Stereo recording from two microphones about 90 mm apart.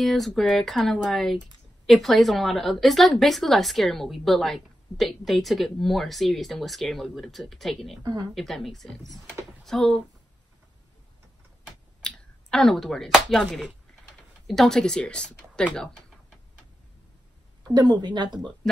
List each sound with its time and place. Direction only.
0.0 s speech: centre (ahead or behind)
8.0 s a woman's voice: 45° right (ahead or behind)
8.4 s speech: centre (ahead or behind)
12.0 s speech: 5° left (ahead or behind)
17.6 s a woman's voice: 50° right (ahead or behind)